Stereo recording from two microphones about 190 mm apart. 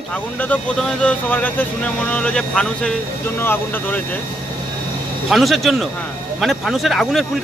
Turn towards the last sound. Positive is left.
turn(degrees=0)  # may be behind; listen again after turning